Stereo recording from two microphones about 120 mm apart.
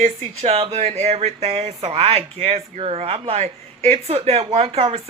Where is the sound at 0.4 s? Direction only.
60° right (ahead or behind).